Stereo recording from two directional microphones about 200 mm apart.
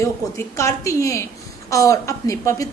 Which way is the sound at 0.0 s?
15° left (ahead or behind).